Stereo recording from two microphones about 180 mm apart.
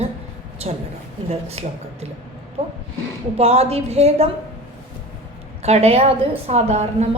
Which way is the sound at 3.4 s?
35° right (ahead or behind).